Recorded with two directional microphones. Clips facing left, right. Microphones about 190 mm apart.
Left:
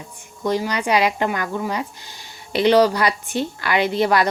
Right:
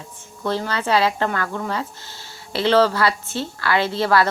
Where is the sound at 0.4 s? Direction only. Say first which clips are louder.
Left 2 dB; 15° left (ahead or behind).